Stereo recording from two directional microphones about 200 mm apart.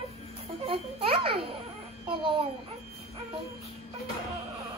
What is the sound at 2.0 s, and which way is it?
Speech, 25° right (ahead or behind).